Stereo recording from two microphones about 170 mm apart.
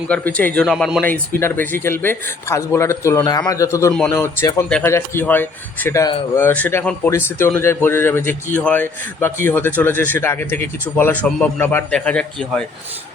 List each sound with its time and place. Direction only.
0.1 s a man's voice: 10° left (ahead or behind)
1.0 s a man's voice: 10° left (ahead or behind)